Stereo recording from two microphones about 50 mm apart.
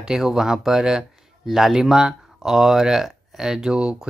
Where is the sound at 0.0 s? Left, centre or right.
Centre.